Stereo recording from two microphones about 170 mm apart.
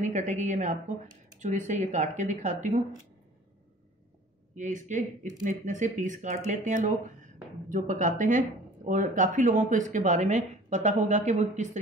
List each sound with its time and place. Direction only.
0.0 s speech: 45° right (ahead or behind)
4.6 s speech: 45° right (ahead or behind)